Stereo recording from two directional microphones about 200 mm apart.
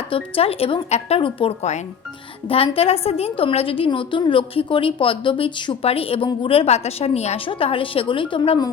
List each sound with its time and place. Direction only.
0.1 s a woman's voice: 30° left (ahead or behind)